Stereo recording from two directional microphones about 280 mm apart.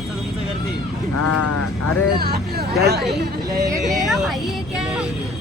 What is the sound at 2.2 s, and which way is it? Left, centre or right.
Speech, right.